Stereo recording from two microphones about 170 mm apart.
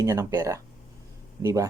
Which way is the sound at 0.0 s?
20° right (ahead or behind).